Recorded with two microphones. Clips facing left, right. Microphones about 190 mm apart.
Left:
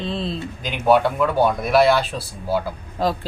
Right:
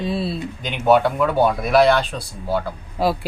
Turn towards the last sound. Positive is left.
turn(degrees=-10)  # may be behind; listen again after turning